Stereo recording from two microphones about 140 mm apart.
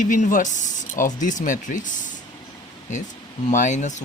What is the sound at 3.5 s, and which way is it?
Speech, 60° left (ahead or behind).